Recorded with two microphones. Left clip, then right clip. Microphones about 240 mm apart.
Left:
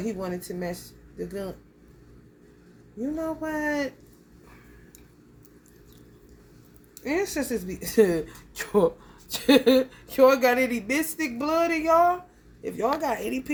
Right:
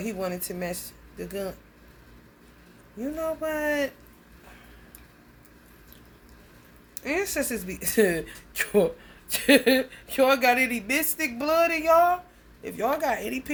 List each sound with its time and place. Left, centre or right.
0.0 s a woman's voice: right
3.0 s a woman's voice: right
7.0 s a woman's voice: centre